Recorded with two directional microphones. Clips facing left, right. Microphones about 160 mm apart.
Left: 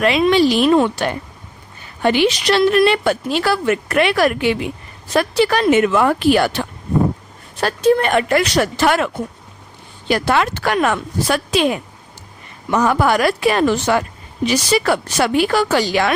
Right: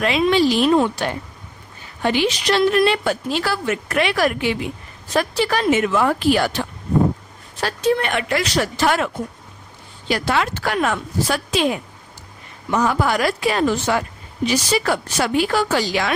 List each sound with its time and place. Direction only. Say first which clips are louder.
0.0 s a woman's voice: left 3 dB; 65° left (ahead or behind)
7.6 s a woman's voice: left 5 dB; 45° left (ahead or behind); by 9.0 s 65° left (ahead or behind)
10.1 s a woman's voice: left 4 dB; 55° left (ahead or behind)